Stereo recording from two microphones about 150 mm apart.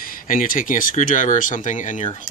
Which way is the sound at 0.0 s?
65° left (ahead or behind).